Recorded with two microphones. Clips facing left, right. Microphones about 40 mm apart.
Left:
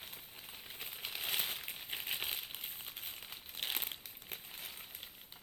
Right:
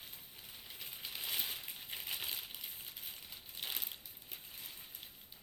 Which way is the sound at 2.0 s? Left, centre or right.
Left.